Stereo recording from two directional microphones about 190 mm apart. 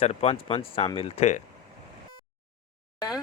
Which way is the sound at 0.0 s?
35° left (ahead or behind).